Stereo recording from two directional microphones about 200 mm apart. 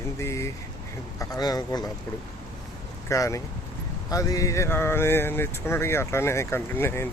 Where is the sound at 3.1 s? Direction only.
15° left (ahead or behind).